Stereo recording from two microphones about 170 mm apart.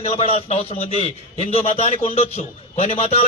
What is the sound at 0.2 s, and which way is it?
A man's voice, 35° left (ahead or behind).